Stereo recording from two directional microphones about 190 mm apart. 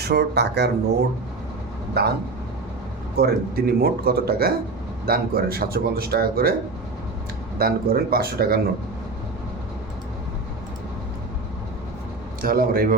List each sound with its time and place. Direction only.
0.0 s speech: 60° right (ahead or behind)
2.0 s speech: 55° right (ahead or behind)
3.2 s speech: 55° right (ahead or behind)
7.6 s speech: 50° right (ahead or behind)
12.4 s speech: 50° right (ahead or behind)